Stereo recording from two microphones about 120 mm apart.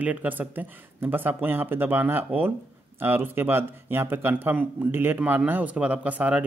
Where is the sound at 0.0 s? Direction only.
15° right (ahead or behind).